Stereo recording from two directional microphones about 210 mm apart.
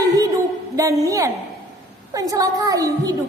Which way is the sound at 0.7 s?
15° right (ahead or behind).